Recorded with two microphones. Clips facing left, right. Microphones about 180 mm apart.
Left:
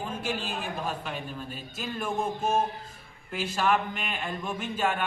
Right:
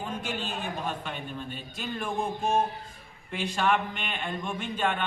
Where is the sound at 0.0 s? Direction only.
5° left (ahead or behind).